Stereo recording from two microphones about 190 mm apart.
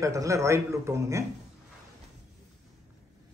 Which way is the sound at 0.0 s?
15° right (ahead or behind).